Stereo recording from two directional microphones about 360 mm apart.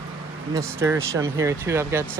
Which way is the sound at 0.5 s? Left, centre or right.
Centre.